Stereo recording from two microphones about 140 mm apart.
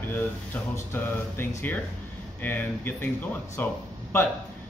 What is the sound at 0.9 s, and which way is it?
Speech, 15° left (ahead or behind).